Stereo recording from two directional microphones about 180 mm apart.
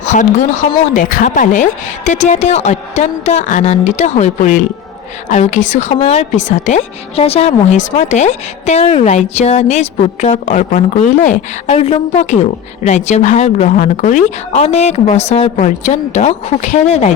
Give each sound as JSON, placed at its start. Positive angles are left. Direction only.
{"t": 0.0, "sound": "a woman's voice", "side_deg": 40}